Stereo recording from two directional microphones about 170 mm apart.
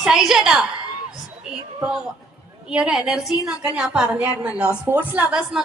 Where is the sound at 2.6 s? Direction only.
5° right (ahead or behind).